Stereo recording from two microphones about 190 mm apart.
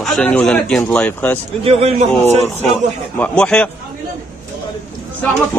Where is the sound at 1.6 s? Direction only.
30° right (ahead or behind).